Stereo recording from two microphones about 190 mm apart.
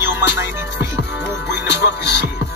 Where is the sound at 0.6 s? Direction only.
10° right (ahead or behind).